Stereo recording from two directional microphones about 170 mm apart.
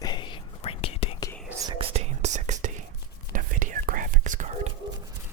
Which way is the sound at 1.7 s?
35° right (ahead or behind).